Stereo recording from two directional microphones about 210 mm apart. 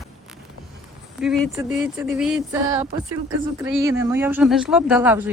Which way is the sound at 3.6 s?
10° right (ahead or behind).